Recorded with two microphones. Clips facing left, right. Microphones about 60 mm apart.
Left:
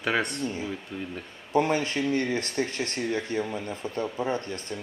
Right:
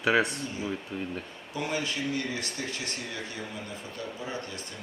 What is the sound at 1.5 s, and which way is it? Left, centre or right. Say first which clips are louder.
Speech: left 8 dB; left.